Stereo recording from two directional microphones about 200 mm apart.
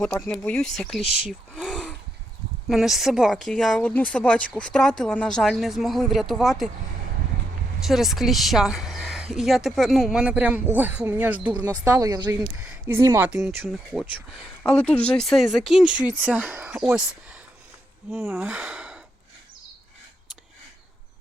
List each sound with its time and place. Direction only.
0.2 s speech: 5° left (ahead or behind)
7.9 s speech: centre (ahead or behind)
11.6 s speech: 20° right (ahead or behind)
12.6 s speech: 5° right (ahead or behind)
18.3 s speech: 10° right (ahead or behind)